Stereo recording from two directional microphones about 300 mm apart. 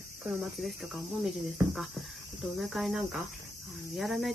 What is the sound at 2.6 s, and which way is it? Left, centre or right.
Speech, centre.